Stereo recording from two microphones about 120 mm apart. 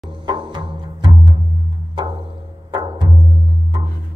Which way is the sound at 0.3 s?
40° right (ahead or behind).